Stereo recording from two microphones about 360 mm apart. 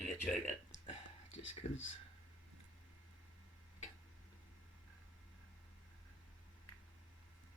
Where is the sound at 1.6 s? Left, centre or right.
Left.